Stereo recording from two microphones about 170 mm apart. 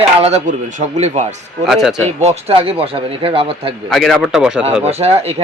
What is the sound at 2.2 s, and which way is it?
Speech, 40° right (ahead or behind).